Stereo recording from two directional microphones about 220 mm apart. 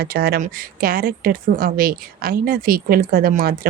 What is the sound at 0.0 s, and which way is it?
Speech, 45° right (ahead or behind).